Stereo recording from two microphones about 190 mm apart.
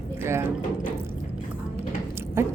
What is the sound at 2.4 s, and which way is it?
Speech, 15° right (ahead or behind).